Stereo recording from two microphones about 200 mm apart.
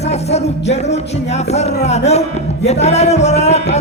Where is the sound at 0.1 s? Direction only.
35° left (ahead or behind).